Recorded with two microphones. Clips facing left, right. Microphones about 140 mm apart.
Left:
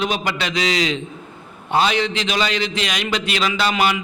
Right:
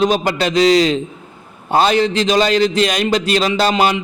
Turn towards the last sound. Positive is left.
turn(degrees=-35)  # may be behind; listen again after turning